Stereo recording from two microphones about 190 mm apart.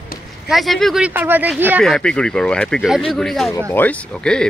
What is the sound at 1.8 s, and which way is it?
Speech, 5° left (ahead or behind).